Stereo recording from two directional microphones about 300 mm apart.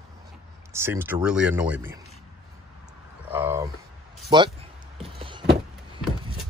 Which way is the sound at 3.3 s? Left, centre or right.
Centre.